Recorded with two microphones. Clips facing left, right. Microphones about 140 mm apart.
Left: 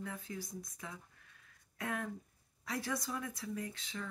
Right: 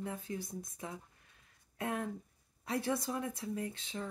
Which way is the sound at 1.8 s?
25° right (ahead or behind).